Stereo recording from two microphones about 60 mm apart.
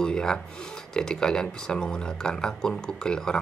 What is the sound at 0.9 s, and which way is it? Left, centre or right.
Speech, centre.